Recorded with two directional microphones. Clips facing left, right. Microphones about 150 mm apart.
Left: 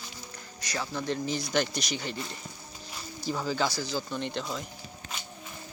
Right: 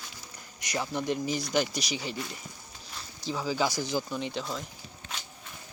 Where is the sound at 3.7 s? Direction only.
20° right (ahead or behind).